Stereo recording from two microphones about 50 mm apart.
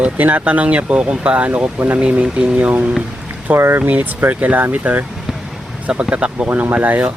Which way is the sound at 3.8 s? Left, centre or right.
Right.